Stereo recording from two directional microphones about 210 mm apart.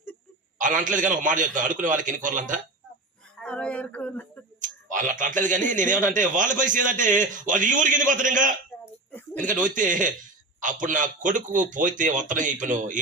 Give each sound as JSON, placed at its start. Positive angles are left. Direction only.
{"t": 0.6, "sound": "a man's voice", "side_deg": -40}
{"t": 3.4, "sound": "speech", "side_deg": 5}
{"t": 4.6, "sound": "a man's voice", "side_deg": -40}
{"t": 8.8, "sound": "a sound", "side_deg": 10}
{"t": 9.5, "sound": "a man's voice", "side_deg": -40}